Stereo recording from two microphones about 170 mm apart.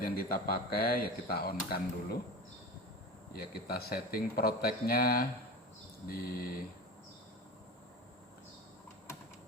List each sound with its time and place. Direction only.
0.0 s speech: 60° left (ahead or behind)
3.3 s speech: 65° left (ahead or behind)